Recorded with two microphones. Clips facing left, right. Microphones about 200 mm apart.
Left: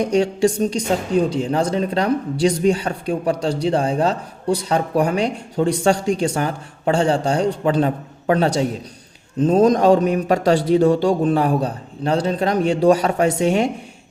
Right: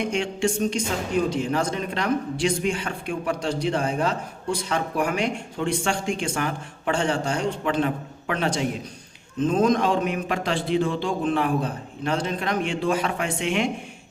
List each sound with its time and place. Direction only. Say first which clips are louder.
0.0 s speech: left 8 dB; 35° left (ahead or behind)